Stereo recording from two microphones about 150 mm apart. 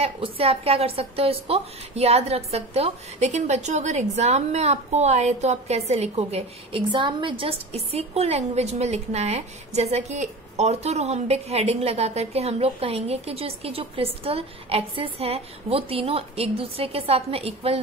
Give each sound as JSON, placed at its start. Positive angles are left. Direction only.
{"t": 0.0, "sound": "a woman's voice", "side_deg": -40}